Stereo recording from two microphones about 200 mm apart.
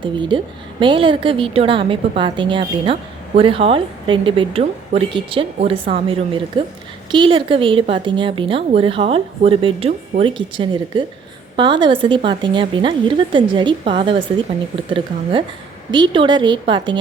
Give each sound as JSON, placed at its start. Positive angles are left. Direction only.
{"t": 0.0, "sound": "a woman's voice", "side_deg": -25}